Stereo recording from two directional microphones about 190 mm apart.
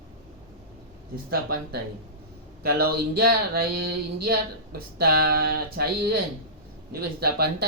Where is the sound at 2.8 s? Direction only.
55° right (ahead or behind).